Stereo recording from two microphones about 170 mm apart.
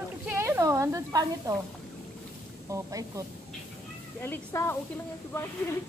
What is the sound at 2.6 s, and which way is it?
Speech, 20° right (ahead or behind).